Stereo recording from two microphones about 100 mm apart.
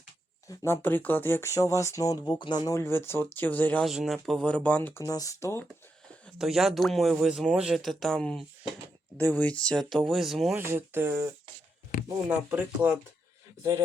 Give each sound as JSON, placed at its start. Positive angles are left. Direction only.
{"t": 0.4, "sound": "speech", "side_deg": 25}
{"t": 2.2, "sound": "speech", "side_deg": 55}
{"t": 2.7, "sound": "speech", "side_deg": 25}
{"t": 3.8, "sound": "speech", "side_deg": -5}
{"t": 4.9, "sound": "speech", "side_deg": 35}
{"t": 6.4, "sound": "speech", "side_deg": 0}
{"t": 10.5, "sound": "speech", "side_deg": -20}
{"t": 12.3, "sound": "speech", "side_deg": -15}